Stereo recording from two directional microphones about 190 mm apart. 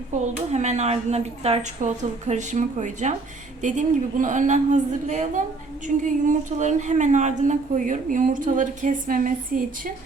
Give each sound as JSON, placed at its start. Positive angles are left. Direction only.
{"t": 0.1, "sound": "a woman's voice", "side_deg": -40}